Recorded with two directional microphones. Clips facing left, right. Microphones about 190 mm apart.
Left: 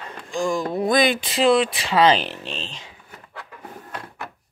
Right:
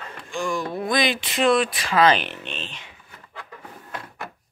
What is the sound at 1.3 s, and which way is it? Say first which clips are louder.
Speech: even; 30° left (ahead or behind).